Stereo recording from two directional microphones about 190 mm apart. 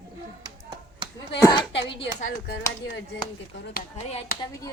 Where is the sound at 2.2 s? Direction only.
50° left (ahead or behind).